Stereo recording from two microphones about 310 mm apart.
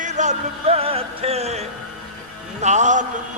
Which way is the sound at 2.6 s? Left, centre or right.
Right.